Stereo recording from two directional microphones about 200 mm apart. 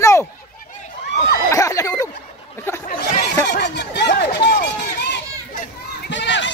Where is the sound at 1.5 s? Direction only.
15° left (ahead or behind).